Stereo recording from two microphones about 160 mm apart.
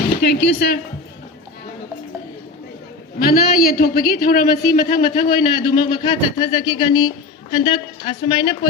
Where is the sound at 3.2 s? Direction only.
70° left (ahead or behind).